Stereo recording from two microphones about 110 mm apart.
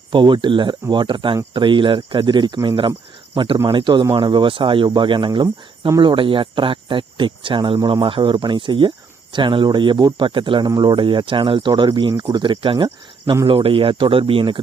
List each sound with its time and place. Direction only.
0.1 s speech: 45° right (ahead or behind)